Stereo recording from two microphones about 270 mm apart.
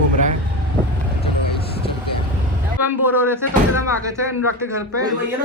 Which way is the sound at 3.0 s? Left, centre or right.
Centre.